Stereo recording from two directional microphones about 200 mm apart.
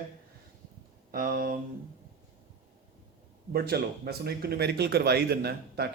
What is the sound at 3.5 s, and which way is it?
Speech, 50° right (ahead or behind).